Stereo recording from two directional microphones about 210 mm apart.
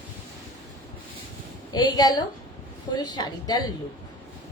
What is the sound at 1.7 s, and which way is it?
A woman's voice, 20° left (ahead or behind).